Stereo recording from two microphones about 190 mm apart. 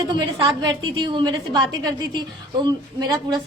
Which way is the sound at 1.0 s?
25° right (ahead or behind).